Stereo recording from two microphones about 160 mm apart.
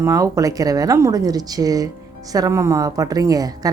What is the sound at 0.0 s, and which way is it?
Speech, 20° right (ahead or behind).